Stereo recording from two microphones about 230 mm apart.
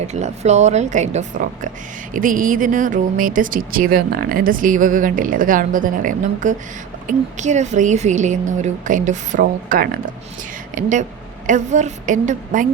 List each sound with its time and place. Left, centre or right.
0.0 s speech: right